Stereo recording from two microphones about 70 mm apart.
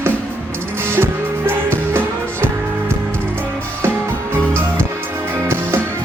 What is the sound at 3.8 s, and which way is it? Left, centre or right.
Music, right.